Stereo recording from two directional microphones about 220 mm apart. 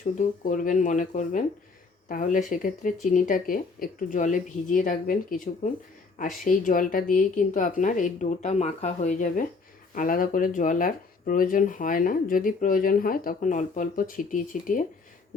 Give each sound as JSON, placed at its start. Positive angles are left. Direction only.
{"t": 0.0, "sound": "speech", "side_deg": 35}